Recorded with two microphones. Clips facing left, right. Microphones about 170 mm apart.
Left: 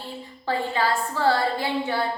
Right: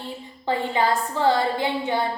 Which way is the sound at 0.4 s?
20° right (ahead or behind).